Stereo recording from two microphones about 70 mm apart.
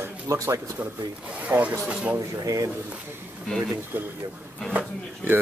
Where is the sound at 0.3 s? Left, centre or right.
Right.